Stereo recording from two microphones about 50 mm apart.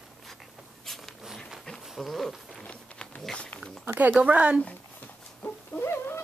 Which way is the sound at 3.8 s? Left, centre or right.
Right.